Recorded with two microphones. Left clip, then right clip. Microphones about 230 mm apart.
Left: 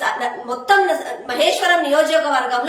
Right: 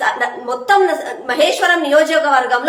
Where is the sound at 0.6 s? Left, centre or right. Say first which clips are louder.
Right 2 dB; centre.